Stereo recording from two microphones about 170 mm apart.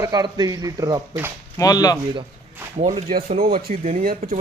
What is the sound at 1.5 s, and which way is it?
Speech, 20° left (ahead or behind).